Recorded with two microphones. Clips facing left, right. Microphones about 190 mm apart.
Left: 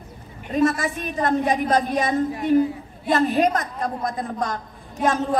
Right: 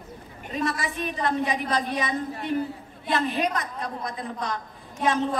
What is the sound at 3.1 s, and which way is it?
A woman's voice, 45° left (ahead or behind).